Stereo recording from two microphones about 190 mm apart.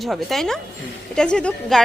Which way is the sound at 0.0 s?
Centre (ahead or behind).